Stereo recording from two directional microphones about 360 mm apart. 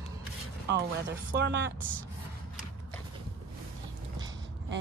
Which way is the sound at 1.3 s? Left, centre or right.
Right.